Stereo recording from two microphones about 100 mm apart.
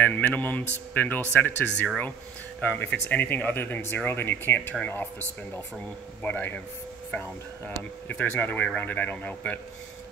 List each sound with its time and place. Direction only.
0.0 s speech: 15° left (ahead or behind)
6.2 s speech: 15° left (ahead or behind)